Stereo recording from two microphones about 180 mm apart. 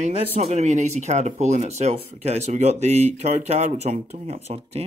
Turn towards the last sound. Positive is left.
turn(degrees=-35)  # may be behind; listen again after turning